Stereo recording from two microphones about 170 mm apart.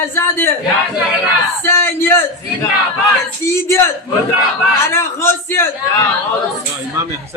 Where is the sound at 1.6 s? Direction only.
15° left (ahead or behind).